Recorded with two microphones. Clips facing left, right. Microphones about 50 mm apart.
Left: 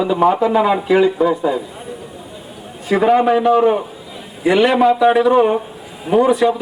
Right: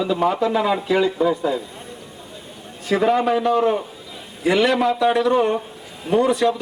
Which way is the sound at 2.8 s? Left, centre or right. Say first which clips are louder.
Left 5 dB; centre.